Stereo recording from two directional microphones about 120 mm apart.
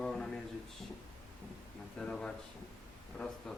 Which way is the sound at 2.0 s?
5° left (ahead or behind).